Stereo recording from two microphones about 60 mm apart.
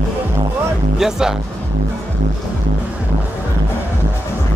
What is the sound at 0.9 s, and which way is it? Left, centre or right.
Speech, centre.